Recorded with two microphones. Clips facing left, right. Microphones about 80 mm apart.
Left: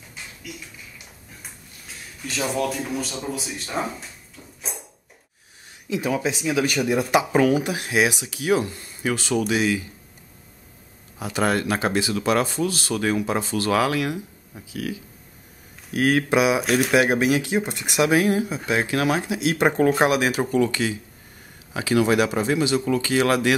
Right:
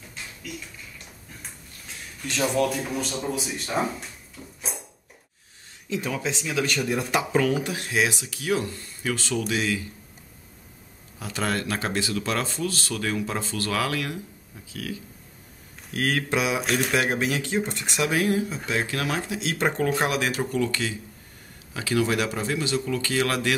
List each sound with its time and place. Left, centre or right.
0.1 s a sound: centre
5.9 s speech: centre
11.1 s speech: centre